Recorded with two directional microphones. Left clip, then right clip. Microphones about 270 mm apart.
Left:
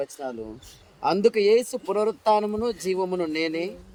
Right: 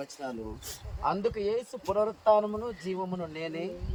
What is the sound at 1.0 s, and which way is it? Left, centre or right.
Speech, left.